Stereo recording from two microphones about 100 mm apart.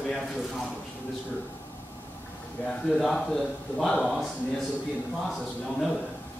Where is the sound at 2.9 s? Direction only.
5° left (ahead or behind).